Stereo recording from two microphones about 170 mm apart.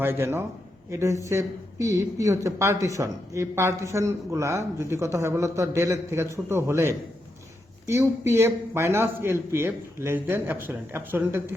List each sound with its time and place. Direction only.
0.0 s speech: 15° right (ahead or behind)